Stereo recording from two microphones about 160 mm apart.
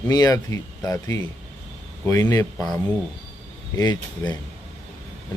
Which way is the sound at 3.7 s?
25° left (ahead or behind).